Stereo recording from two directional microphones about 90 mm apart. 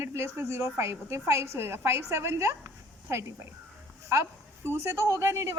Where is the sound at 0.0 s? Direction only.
30° right (ahead or behind).